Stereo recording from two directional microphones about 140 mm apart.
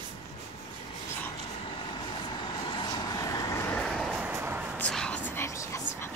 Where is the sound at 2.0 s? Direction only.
35° left (ahead or behind); by 3.9 s 15° left (ahead or behind).